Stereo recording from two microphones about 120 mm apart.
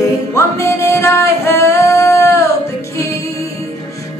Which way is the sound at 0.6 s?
25° left (ahead or behind).